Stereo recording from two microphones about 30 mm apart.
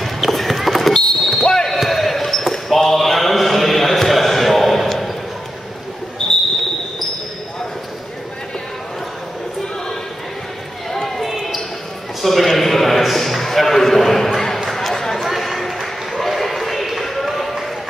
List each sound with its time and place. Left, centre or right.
0.0 s clip-clop: centre
0.9 s basketball bounce: centre
1.4 s basketball bounce: left
1.7 s basketball bounce: centre
6.2 s a sound: left
10.9 s run: centre
11.2 s basketball bounce: centre
12.2 s a sound: centre
15.1 s a sound: centre